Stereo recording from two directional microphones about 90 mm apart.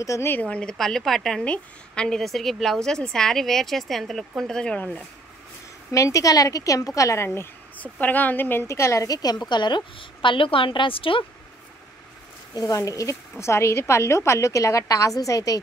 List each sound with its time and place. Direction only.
0.0 s a woman's voice: 35° left (ahead or behind)
0.3 s a woman's voice: 15° left (ahead or behind)
5.9 s a woman's voice: 35° left (ahead or behind)
7.2 s speech: 20° left (ahead or behind)
9.0 s a woman's voice: 45° left (ahead or behind)
9.5 s a woman's voice: 55° left (ahead or behind); by 11.2 s 85° left
12.5 s a woman's voice: 40° left (ahead or behind)